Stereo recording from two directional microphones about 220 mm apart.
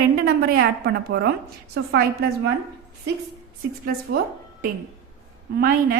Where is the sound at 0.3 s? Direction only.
45° right (ahead or behind).